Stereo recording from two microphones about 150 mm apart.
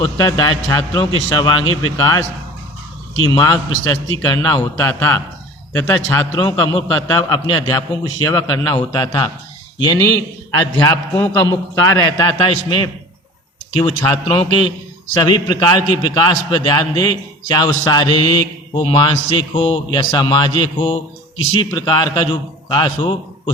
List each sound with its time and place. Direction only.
0.3 s a man's voice: 25° left (ahead or behind)
3.2 s a man's voice: 25° left (ahead or behind)